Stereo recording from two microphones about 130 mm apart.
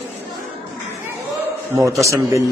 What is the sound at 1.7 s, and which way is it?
Speech, 25° right (ahead or behind).